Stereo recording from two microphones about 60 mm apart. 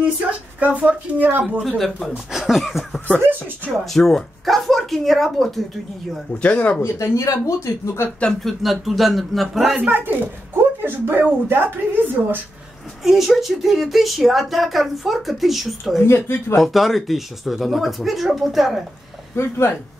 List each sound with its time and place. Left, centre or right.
0.6 s a woman's voice: right
1.8 s speech: centre
3.2 s speech: right
3.8 s speech: centre
6.4 s speech: left
6.8 s speech: left
8.5 s speech: centre
9.8 s speech: right
13.0 s speech: centre
16.0 s speech: left
16.5 s speech: centre